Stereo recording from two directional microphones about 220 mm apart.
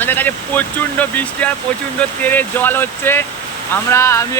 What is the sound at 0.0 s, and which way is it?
Speech, 10° left (ahead or behind).